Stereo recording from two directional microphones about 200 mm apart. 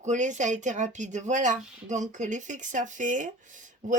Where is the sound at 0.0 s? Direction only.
35° right (ahead or behind).